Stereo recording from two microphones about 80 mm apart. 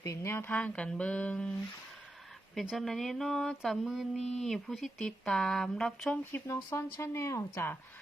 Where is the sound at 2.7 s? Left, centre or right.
Centre.